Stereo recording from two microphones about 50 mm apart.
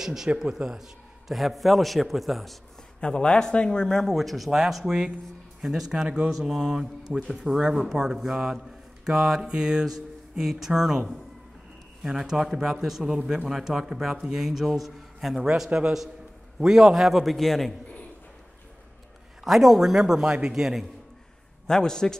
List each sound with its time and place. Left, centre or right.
0.0 s speech: centre
1.3 s a man's voice: centre
3.0 s a man's voice: centre
4.0 s a man's voice: centre
12.0 s a man's voice: centre
19.4 s a man's voice: centre
21.6 s a man's voice: centre